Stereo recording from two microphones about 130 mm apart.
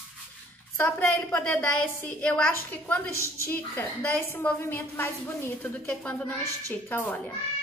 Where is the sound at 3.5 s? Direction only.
20° left (ahead or behind).